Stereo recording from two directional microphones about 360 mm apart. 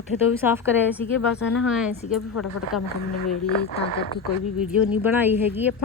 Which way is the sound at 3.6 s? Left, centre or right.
Left.